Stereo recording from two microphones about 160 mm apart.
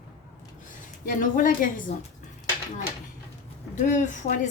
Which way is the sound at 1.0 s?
60° left (ahead or behind).